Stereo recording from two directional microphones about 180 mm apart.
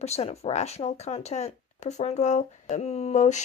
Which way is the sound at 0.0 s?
35° left (ahead or behind).